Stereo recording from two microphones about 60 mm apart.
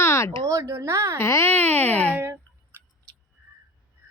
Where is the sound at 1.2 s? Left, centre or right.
Left.